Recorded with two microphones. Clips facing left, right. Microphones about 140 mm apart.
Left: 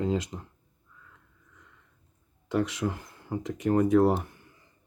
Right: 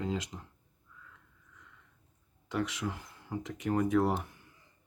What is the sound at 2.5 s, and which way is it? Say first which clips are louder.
Speech: left 6 dB; 40° left (ahead or behind).